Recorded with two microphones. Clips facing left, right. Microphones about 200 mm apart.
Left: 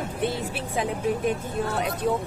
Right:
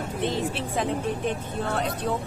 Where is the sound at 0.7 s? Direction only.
10° left (ahead or behind).